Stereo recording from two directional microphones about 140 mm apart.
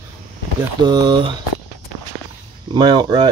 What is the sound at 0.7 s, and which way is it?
Speech, 30° right (ahead or behind).